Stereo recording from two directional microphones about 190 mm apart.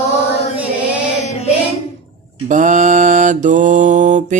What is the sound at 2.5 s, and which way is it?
Mantra, 40° right (ahead or behind).